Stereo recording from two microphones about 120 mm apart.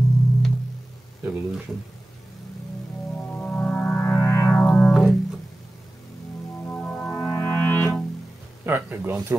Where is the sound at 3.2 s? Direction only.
15° left (ahead or behind).